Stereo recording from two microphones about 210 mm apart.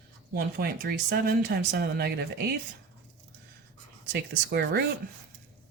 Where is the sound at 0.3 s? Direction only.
45° right (ahead or behind).